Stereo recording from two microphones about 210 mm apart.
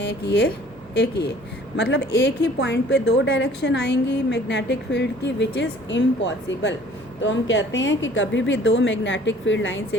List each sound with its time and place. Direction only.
0.0 s a woman's voice: 55° left (ahead or behind)
1.7 s a woman's voice: 55° left (ahead or behind)